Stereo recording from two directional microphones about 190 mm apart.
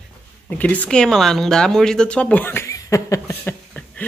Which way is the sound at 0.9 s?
5° left (ahead or behind).